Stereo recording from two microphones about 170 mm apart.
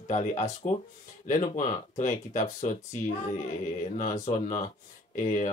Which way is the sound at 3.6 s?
45° left (ahead or behind).